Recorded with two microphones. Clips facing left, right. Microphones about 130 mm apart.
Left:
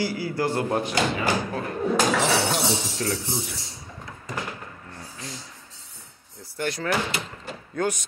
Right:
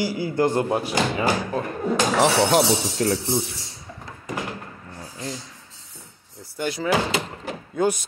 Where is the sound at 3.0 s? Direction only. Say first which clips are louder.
Right 6 dB; 35° right (ahead or behind).